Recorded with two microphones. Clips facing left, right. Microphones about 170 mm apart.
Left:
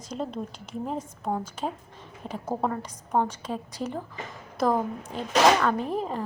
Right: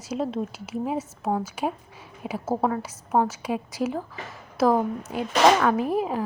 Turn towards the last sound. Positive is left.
turn(degrees=-10)  # may be behind; listen again after turning